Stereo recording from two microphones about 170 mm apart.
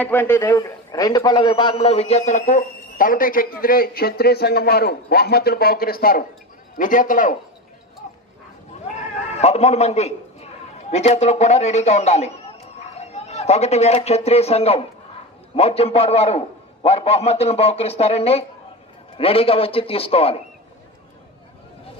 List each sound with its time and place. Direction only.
0.0 s a man's voice: 10° left (ahead or behind); by 7.3 s 50° left (ahead or behind)
8.0 s bow-wow: 45° left (ahead or behind)
9.3 s a man's voice: 40° left (ahead or behind)